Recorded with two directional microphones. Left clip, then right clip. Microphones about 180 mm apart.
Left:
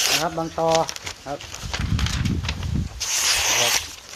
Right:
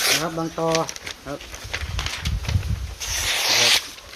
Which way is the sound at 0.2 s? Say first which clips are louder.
Left 2 dB; 20° right (ahead or behind).